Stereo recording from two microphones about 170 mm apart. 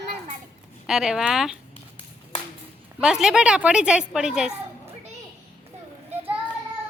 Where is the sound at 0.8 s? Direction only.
5° right (ahead or behind).